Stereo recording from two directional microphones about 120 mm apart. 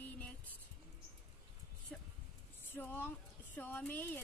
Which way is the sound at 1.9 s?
5° left (ahead or behind).